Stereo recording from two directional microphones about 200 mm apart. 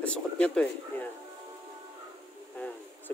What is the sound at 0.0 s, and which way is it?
Speech, 5° left (ahead or behind).